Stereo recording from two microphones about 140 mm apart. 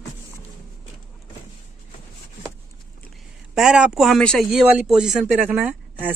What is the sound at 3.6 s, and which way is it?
Speech, 5° right (ahead or behind).